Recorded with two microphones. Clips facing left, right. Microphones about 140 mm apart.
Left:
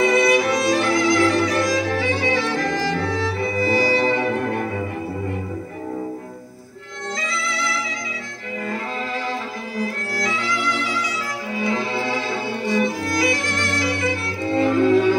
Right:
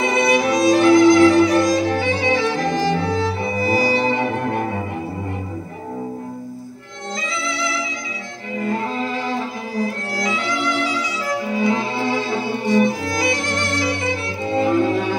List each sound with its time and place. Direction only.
0.1 s violin: 25° right (ahead or behind)
8.5 s violin: 25° right (ahead or behind)
12.6 s music: 20° right (ahead or behind)